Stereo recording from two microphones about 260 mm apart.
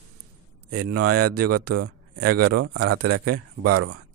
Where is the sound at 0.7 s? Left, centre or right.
Right.